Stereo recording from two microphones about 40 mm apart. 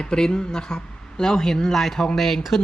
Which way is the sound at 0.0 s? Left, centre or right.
Centre.